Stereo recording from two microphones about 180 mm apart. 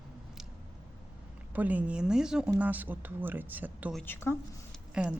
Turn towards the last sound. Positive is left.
turn(degrees=-5)  # may be behind; listen again after turning